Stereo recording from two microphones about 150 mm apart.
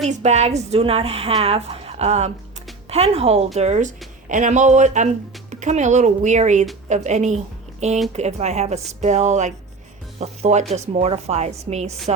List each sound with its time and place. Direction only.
0.0 s a woman's voice: 50° right (ahead or behind)